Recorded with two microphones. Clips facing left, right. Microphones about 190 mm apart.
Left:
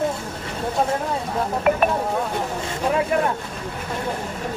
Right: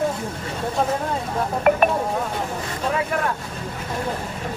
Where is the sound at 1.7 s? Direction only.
55° right (ahead or behind).